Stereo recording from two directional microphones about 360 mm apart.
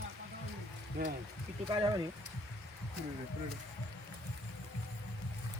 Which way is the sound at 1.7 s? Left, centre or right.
Centre.